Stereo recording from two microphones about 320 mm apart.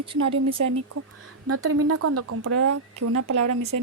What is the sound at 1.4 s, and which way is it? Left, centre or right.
Speech, right.